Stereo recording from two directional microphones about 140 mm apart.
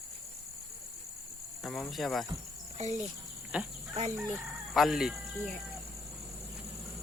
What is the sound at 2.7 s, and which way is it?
Insect, 55° right (ahead or behind).